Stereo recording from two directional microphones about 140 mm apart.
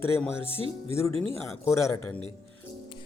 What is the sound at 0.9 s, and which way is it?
A man's voice, 20° left (ahead or behind).